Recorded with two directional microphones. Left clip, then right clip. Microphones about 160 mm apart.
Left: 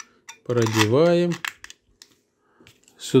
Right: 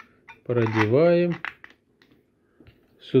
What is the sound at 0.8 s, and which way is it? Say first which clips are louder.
Speech: even; 25° left (ahead or behind).